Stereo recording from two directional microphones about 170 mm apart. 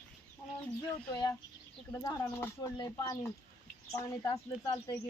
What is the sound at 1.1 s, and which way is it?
Speech, 20° left (ahead or behind).